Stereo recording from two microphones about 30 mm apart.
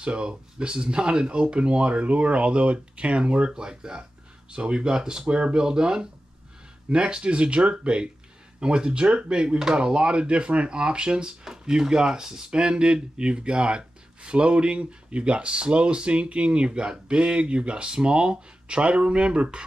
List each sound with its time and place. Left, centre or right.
0.0 s speech: right
7.2 s speech: right